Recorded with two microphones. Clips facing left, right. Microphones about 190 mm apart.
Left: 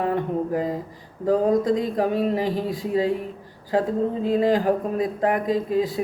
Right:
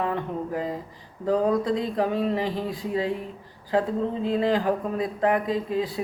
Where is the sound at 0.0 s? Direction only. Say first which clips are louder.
Left 4 dB; 40° left (ahead or behind).